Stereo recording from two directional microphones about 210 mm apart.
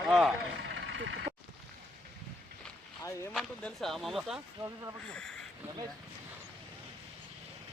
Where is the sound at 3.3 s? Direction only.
Centre (ahead or behind).